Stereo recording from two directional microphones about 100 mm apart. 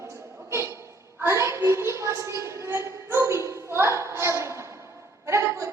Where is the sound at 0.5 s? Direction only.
30° right (ahead or behind).